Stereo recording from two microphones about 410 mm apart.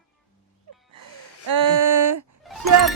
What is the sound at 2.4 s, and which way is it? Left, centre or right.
Speech, centre.